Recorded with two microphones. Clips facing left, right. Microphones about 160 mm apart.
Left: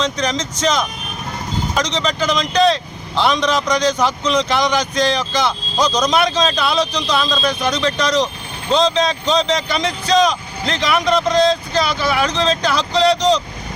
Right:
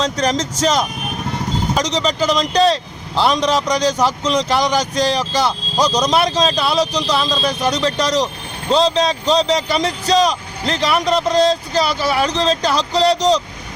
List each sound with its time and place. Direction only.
0.0 s speech: 40° right (ahead or behind)